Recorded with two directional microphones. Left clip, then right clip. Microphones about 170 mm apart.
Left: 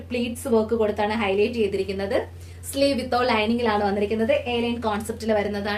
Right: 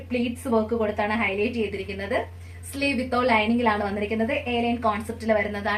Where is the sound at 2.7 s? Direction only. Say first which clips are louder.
Left 3 dB; 50° left (ahead or behind).